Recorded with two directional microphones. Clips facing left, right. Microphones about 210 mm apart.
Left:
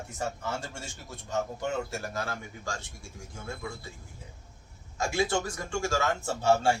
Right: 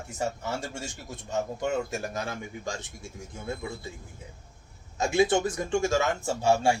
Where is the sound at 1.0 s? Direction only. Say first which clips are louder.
Right 1 dB; 15° right (ahead or behind).